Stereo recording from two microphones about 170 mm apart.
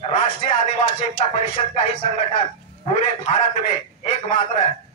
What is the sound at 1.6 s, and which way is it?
Speech, 40° left (ahead or behind).